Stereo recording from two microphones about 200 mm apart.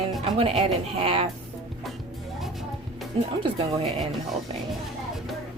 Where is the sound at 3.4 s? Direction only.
30° right (ahead or behind).